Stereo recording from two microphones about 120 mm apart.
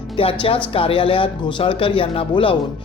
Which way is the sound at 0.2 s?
50° left (ahead or behind).